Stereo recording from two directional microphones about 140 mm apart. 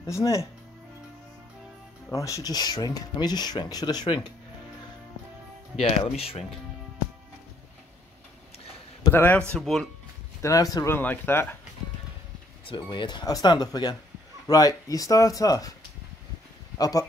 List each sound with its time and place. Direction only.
0.0 s speech: 20° left (ahead or behind)
2.0 s speech: 20° left (ahead or behind)
6.0 s speech: 45° left (ahead or behind)
9.1 s speech: 15° left (ahead or behind)
9.5 s speech: centre (ahead or behind)
10.4 s speech: 25° left (ahead or behind)
11.0 s speech: 15° left (ahead or behind)
12.6 s speech: 35° left (ahead or behind)
16.7 s speech: 25° left (ahead or behind)